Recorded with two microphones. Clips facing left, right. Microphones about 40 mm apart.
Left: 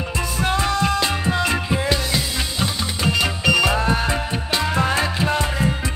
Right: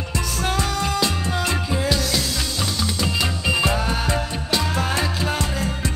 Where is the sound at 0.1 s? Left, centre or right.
Left.